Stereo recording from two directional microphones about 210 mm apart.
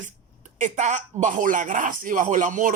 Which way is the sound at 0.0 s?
35° right (ahead or behind).